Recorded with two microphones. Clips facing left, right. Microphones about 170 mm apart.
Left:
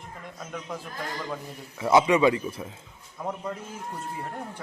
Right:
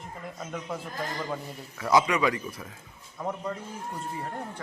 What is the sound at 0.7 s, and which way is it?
Speech, 5° right (ahead or behind).